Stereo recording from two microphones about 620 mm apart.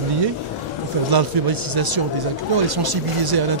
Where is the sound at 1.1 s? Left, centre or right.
Right.